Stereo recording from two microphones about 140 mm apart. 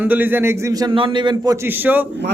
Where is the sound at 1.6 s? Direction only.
15° right (ahead or behind).